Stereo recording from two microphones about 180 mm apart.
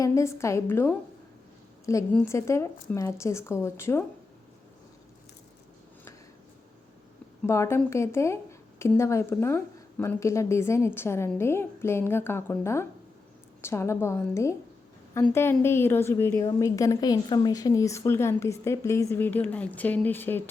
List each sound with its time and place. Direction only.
0.0 s a woman's voice: 15° left (ahead or behind)
7.4 s a woman's voice: 15° left (ahead or behind)